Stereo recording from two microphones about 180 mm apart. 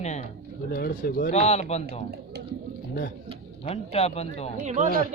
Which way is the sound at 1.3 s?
35° left (ahead or behind).